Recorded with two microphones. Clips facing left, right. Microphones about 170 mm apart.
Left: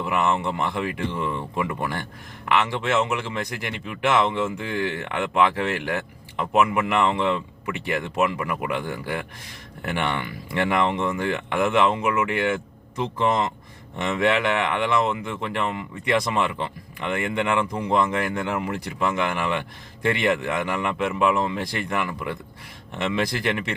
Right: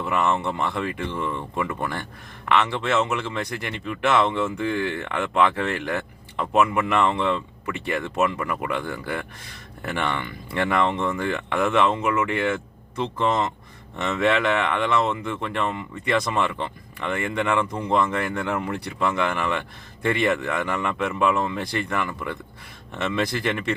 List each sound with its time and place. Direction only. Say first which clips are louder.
0.0 s speech: even; 10° left (ahead or behind)